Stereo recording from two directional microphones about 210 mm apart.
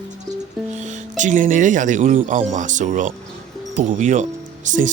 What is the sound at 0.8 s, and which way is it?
Speech, 35° right (ahead or behind).